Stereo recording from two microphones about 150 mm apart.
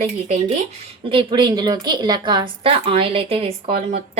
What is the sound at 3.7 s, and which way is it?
Speech, 60° right (ahead or behind).